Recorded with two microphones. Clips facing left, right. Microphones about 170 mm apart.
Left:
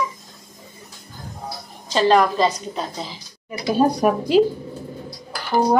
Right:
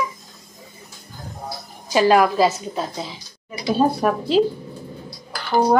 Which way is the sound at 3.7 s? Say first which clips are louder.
Left 2 dB; 15° left (ahead or behind).